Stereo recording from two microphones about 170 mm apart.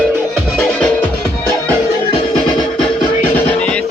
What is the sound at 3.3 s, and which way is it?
Music, 5° left (ahead or behind).